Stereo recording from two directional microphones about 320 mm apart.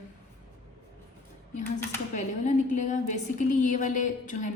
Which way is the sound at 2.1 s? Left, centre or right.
Left.